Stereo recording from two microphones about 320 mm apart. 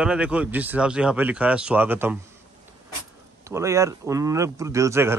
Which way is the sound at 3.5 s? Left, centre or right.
Centre.